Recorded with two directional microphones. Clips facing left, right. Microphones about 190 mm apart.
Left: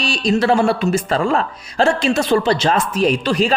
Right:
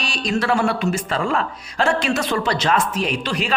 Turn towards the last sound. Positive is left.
turn(degrees=40)  # may be behind; listen again after turning